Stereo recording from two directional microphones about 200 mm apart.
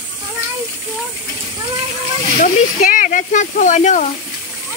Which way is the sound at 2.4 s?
40° left (ahead or behind).